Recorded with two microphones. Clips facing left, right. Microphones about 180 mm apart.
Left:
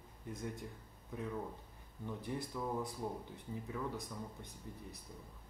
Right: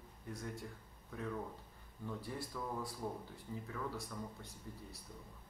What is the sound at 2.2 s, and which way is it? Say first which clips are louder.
Speech: left 6 dB; 20° left (ahead or behind).